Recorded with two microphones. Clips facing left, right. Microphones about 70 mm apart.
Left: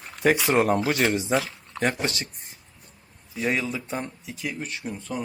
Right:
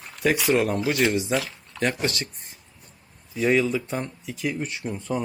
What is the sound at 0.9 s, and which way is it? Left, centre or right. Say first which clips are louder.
Speech: even; left.